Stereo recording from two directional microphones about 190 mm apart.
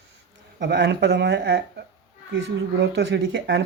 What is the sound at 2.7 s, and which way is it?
Speech, 70° right (ahead or behind).